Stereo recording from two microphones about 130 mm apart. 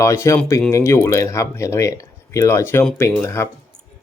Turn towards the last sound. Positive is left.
turn(degrees=20)  # may be behind; listen again after turning